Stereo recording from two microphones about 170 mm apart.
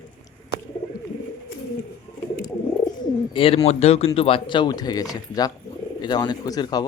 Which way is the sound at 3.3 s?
30° left (ahead or behind).